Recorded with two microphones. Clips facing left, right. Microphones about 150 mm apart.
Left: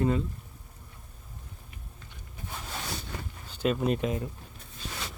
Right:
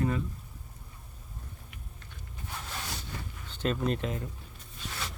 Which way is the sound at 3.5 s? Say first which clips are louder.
Left 3 dB; 10° left (ahead or behind).